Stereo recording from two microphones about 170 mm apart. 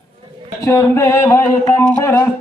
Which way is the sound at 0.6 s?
15° left (ahead or behind).